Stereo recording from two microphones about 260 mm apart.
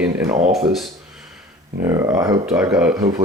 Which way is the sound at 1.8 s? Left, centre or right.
Centre.